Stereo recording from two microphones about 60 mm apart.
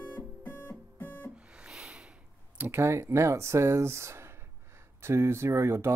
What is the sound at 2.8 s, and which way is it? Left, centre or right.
Speech, right.